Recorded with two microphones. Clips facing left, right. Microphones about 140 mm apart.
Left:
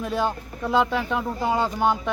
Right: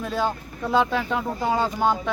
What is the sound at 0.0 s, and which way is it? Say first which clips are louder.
Speech: even; 15° left (ahead or behind).